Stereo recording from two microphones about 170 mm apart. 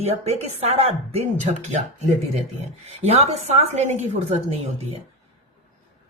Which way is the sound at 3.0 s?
40° right (ahead or behind).